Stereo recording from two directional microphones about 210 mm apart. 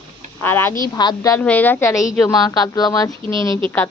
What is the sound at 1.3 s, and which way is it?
Speech, 10° left (ahead or behind).